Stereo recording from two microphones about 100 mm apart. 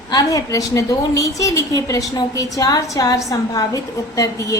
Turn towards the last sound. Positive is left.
turn(degrees=35)  # may be behind; listen again after turning